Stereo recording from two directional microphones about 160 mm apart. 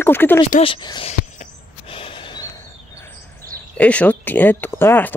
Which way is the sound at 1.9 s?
35° left (ahead or behind).